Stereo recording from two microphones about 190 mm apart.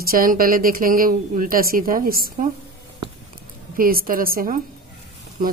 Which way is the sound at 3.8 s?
50° right (ahead or behind).